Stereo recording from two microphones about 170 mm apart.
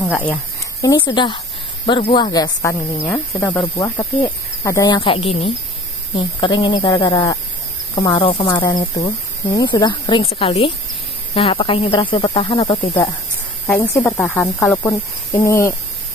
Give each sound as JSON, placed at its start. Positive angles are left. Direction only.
{"t": 0.0, "sound": "speech", "side_deg": 10}
{"t": 0.7, "sound": "speech", "side_deg": 25}
{"t": 3.7, "sound": "speech", "side_deg": 25}
{"t": 13.7, "sound": "speech", "side_deg": 10}